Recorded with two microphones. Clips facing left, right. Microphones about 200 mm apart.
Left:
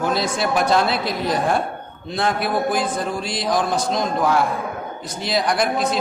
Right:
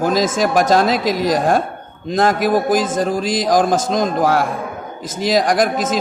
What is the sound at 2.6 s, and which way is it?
Speech, 90° right.